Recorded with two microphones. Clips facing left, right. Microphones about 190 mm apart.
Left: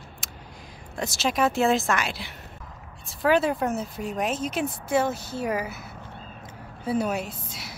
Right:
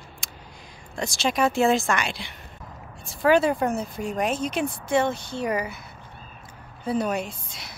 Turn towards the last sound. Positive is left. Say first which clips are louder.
# right 1 dB
turn(degrees=5)  # may be behind; listen again after turning